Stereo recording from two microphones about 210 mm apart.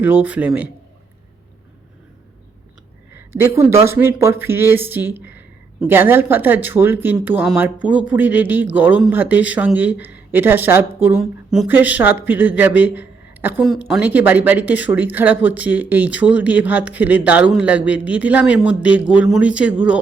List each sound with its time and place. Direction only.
0.0 s speech: 10° right (ahead or behind)
3.2 s a woman's voice: 10° right (ahead or behind)